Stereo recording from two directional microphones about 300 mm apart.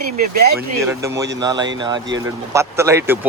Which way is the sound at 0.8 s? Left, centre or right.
Centre.